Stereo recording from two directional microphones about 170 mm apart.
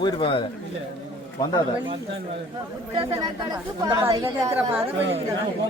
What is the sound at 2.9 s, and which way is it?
Speech, 30° right (ahead or behind).